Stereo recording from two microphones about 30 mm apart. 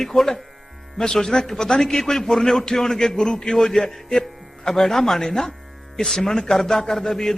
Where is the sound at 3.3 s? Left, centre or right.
Centre.